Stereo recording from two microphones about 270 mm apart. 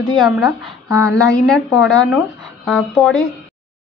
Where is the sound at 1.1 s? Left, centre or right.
Centre.